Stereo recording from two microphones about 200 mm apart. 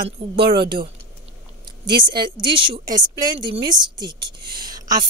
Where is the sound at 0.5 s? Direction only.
25° right (ahead or behind).